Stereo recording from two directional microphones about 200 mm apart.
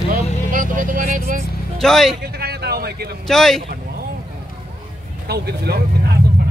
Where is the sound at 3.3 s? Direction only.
Centre (ahead or behind).